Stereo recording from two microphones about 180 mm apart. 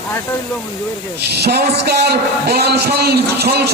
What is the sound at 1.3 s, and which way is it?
A man's voice, 65° right (ahead or behind).